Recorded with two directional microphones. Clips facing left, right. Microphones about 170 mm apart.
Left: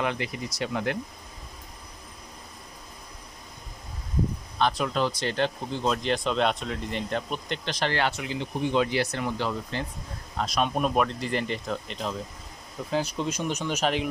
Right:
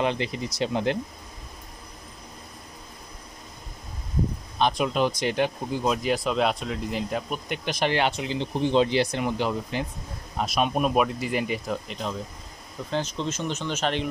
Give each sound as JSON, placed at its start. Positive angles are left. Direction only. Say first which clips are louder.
{"t": 0.0, "sound": "speech", "louder": "right 3 dB", "side_deg": -25}
{"t": 4.6, "sound": "speech", "louder": "right 2 dB", "side_deg": -15}